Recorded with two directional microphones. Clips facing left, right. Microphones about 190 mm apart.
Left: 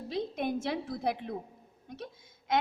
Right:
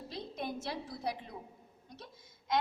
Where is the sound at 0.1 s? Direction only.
55° left (ahead or behind).